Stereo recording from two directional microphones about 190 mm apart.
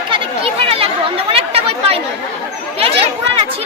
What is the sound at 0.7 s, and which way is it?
Chatter, 30° right (ahead or behind).